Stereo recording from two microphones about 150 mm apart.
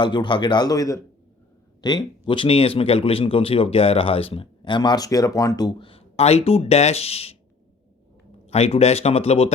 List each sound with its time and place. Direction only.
0.0 s speech: 30° left (ahead or behind)
8.4 s speech: 45° left (ahead or behind)